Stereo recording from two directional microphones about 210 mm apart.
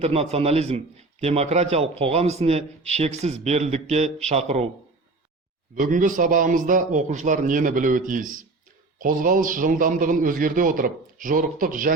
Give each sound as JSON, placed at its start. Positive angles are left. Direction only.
{"t": 0.0, "sound": "a man's voice", "side_deg": -30}
{"t": 5.7, "sound": "a man's voice", "side_deg": -40}